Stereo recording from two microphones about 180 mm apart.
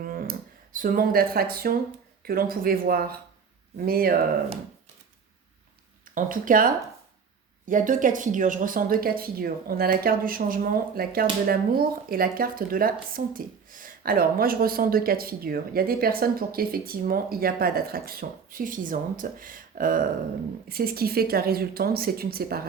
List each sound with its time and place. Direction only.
0.0 s a sound: 55° right (ahead or behind)
2.2 s speech: 55° right (ahead or behind)
6.1 s speech: 50° right (ahead or behind)